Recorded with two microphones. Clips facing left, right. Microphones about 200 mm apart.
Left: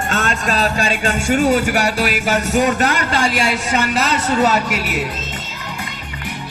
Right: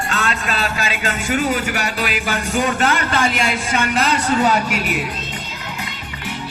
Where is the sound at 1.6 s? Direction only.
45° left (ahead or behind).